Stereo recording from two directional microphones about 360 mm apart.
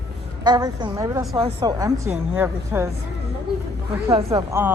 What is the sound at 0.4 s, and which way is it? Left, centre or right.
Speech, centre.